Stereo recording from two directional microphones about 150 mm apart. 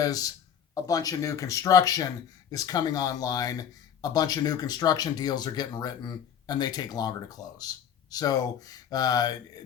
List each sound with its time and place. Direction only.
0.0 s speech: 25° left (ahead or behind)